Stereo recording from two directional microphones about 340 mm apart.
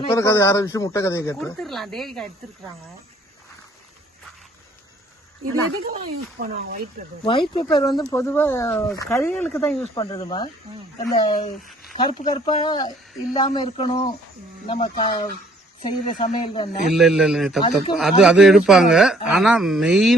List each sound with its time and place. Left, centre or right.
0.0 s speech: centre
6.4 s speech: right
7.3 s speech: centre
11.0 s speech: left
11.9 s speech: centre
16.9 s speech: centre